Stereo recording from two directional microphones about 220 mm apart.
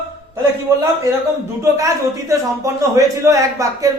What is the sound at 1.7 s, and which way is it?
A man's voice, 15° right (ahead or behind).